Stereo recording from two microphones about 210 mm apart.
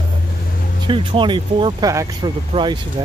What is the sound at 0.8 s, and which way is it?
Speech, 25° right (ahead or behind).